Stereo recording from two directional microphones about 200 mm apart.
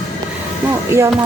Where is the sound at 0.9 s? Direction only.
10° right (ahead or behind).